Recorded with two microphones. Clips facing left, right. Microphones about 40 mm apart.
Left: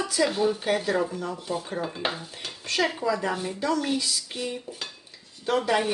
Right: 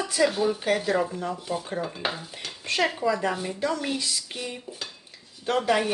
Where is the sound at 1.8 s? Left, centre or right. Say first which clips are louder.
Even; centre.